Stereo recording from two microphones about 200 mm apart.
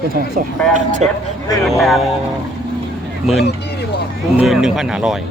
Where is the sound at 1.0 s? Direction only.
35° right (ahead or behind).